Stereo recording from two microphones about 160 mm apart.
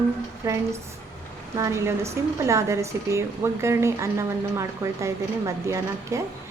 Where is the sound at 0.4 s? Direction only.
20° right (ahead or behind).